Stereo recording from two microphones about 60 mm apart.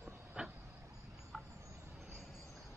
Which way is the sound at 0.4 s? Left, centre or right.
Centre.